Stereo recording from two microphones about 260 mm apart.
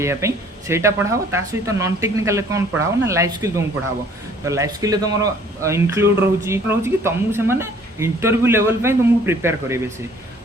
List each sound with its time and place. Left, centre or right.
0.0 s speech: centre